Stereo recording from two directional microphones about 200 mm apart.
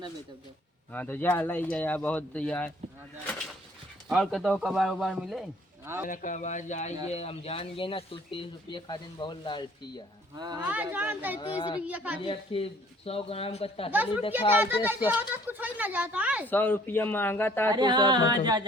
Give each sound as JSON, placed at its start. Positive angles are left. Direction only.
{"t": 0.9, "sound": "speech", "side_deg": 10}
{"t": 4.1, "sound": "speech", "side_deg": 0}
{"t": 5.8, "sound": "speech", "side_deg": -10}
{"t": 6.1, "sound": "speech", "side_deg": 40}
{"t": 10.3, "sound": "singing", "side_deg": -20}
{"t": 10.6, "sound": "speech", "side_deg": -10}
{"t": 11.3, "sound": "speech", "side_deg": 25}
{"t": 11.9, "sound": "speech", "side_deg": -5}
{"t": 12.2, "sound": "speech", "side_deg": 25}
{"t": 14.6, "sound": "speech", "side_deg": -10}
{"t": 16.5, "sound": "speech", "side_deg": 10}
{"t": 17.7, "sound": "singing", "side_deg": -20}